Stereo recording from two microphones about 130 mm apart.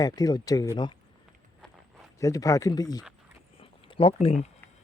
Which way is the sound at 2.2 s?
25° left (ahead or behind).